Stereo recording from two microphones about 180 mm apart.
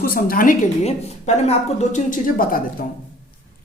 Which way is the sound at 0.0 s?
55° left (ahead or behind).